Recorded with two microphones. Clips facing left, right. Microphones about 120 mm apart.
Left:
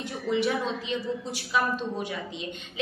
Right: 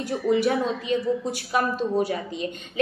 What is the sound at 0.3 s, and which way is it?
A woman's voice, 45° right (ahead or behind).